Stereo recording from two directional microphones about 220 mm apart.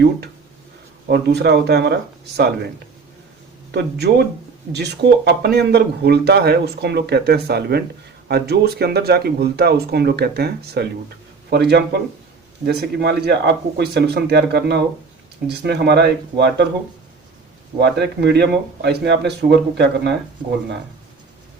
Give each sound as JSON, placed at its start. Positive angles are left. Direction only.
{"t": 1.0, "sound": "speech", "side_deg": -50}
{"t": 3.7, "sound": "speech", "side_deg": -50}
{"t": 17.7, "sound": "speech", "side_deg": -50}